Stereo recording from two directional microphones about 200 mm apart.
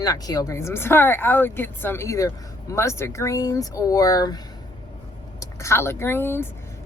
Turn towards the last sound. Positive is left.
turn(degrees=10)  # may be behind; listen again after turning